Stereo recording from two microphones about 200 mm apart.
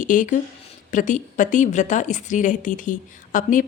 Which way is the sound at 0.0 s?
40° left (ahead or behind).